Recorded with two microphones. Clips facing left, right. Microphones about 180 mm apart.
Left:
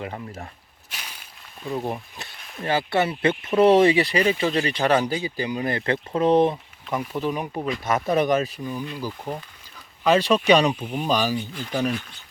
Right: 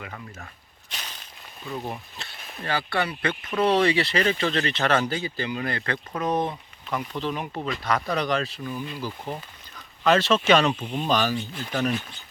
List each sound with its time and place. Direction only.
0.0 s speech: 35° left (ahead or behind)
0.9 s crushing: 10° left (ahead or behind)
1.7 s speech: 20° left (ahead or behind)